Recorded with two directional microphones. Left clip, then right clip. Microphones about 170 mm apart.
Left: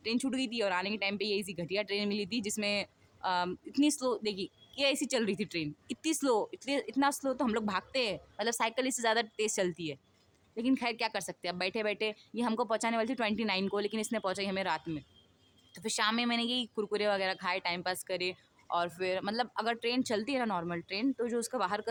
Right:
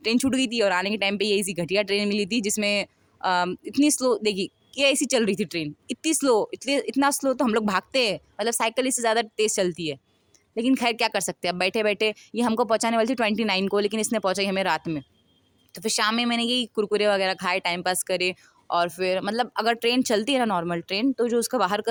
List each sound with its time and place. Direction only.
0.0 s speech: 50° right (ahead or behind)